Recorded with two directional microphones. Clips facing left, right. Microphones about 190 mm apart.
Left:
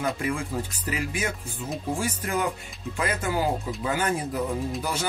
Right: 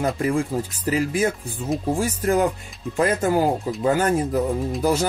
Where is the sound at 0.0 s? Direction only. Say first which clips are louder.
Right 6 dB; 40° right (ahead or behind).